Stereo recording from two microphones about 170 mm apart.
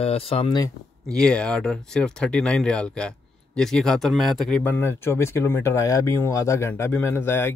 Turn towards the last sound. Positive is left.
turn(degrees=15)  # may be behind; listen again after turning